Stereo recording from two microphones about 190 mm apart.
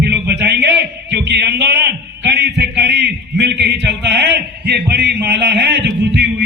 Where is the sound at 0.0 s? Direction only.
60° right (ahead or behind).